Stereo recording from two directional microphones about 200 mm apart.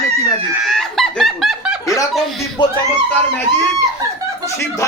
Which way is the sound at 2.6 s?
25° left (ahead or behind).